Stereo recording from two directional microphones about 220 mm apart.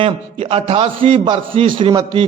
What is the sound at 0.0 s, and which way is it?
Speech, 25° right (ahead or behind).